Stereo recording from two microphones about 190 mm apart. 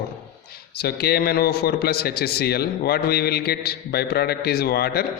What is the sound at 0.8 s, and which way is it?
A man's voice, 55° left (ahead or behind).